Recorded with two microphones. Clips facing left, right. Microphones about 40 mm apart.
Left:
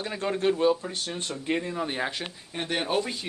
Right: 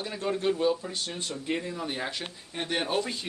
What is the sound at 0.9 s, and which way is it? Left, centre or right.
A man's voice, left.